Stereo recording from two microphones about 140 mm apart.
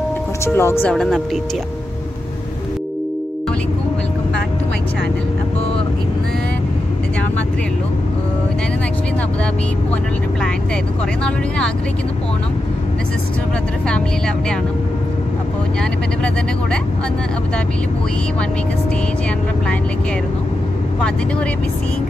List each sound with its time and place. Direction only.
0.6 s speech: 15° left (ahead or behind)
0.9 s speech: centre (ahead or behind)
11.2 s speech: 5° left (ahead or behind)